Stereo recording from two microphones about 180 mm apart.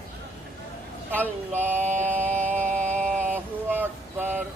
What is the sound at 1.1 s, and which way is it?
Speech, 10° left (ahead or behind).